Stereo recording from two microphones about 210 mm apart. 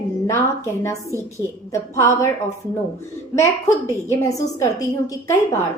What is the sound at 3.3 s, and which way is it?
A woman's voice, 15° left (ahead or behind).